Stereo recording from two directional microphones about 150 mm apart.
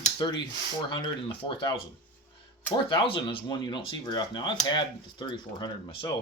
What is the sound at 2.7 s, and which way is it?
Speech, 35° left (ahead or behind).